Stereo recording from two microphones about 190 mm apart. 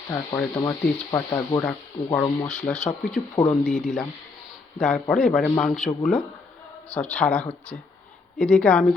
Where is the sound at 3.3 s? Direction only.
15° left (ahead or behind).